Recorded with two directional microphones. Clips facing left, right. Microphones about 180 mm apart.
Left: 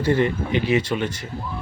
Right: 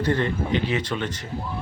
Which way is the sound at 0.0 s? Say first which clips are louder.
Left 3 dB; 10° left (ahead or behind).